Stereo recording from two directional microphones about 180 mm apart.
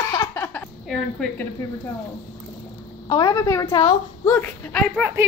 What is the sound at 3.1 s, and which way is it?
A woman's voice, 20° left (ahead or behind).